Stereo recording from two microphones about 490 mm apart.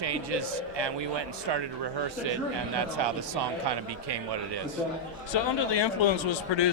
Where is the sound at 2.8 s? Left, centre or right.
Right.